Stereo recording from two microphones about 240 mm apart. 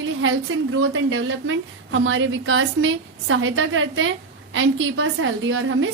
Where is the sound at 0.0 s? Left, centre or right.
Right.